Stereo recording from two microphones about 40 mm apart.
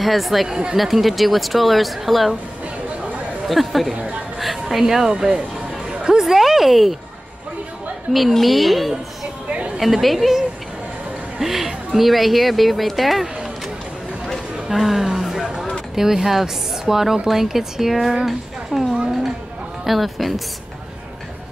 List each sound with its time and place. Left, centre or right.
0.0 s speech: centre
0.5 s speech: right
0.7 s speech: centre
3.4 s speech: centre
5.1 s speech: right
5.9 s music: centre
6.3 s speech: centre
8.1 s speech: centre
9.5 s a sound: right
9.8 s speech: centre
14.2 s chatter: centre
14.8 s music: centre
15.9 s speech: centre